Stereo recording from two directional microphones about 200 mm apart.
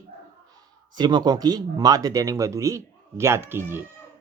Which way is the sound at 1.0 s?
20° right (ahead or behind).